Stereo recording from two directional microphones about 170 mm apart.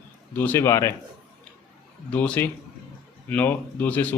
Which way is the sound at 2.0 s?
5° left (ahead or behind).